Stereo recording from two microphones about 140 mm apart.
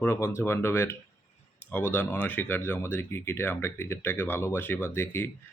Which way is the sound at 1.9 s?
10° left (ahead or behind).